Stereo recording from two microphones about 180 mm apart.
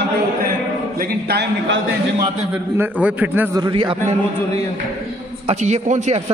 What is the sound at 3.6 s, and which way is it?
Speech, 25° right (ahead or behind).